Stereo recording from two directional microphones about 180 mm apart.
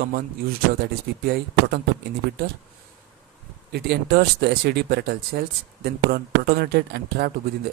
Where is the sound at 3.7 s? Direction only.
65° right (ahead or behind).